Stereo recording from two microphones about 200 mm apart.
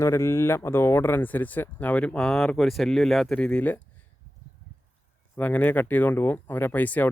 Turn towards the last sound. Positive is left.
turn(degrees=10)  # may be behind; listen again after turning